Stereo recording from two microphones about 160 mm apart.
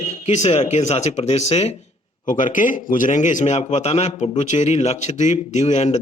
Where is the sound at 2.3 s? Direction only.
55° left (ahead or behind).